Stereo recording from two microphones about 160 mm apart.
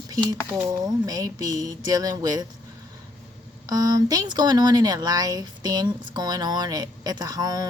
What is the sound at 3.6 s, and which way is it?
Speech, 25° right (ahead or behind).